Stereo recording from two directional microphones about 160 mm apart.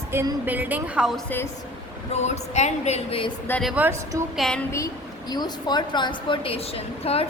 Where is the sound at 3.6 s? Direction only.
5° right (ahead or behind).